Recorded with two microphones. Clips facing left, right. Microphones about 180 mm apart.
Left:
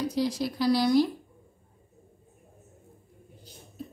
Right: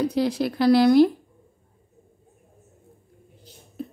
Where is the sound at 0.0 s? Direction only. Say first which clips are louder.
Right 5 dB; 60° right (ahead or behind).